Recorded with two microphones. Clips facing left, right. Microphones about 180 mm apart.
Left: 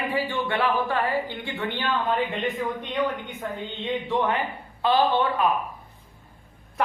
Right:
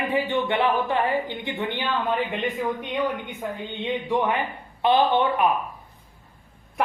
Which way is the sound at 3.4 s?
10° right (ahead or behind).